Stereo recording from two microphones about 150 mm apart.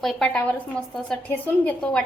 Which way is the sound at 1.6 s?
5° left (ahead or behind).